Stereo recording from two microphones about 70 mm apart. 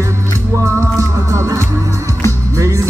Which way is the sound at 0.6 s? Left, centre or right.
Right.